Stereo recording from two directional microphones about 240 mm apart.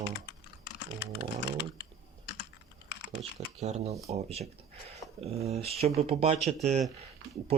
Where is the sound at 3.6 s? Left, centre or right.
Right.